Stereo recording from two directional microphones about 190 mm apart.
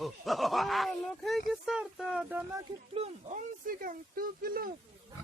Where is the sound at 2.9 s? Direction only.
30° right (ahead or behind).